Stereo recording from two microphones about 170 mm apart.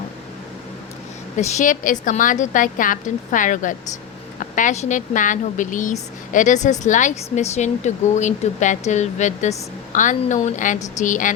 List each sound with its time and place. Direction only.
1.4 s speech: 45° left (ahead or behind)